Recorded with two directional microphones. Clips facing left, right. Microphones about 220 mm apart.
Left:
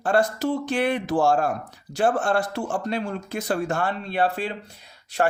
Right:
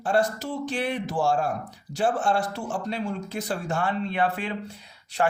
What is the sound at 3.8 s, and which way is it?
Speech, 35° left (ahead or behind).